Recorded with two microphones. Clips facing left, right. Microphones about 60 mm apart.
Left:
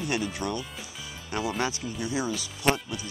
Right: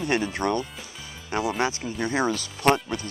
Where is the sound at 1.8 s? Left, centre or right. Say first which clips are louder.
Right 5 dB; right.